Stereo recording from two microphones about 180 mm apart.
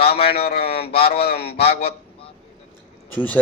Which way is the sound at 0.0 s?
60° left (ahead or behind).